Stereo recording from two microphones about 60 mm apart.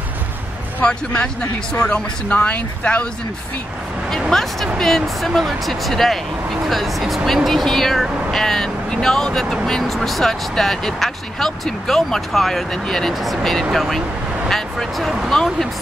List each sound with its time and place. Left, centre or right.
0.8 s speech: centre
4.3 s speech: centre